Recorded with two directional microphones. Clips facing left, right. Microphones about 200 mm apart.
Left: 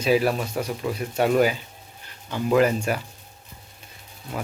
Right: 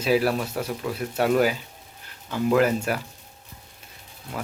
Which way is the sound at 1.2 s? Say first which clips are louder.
Left 1 dB; centre (ahead or behind).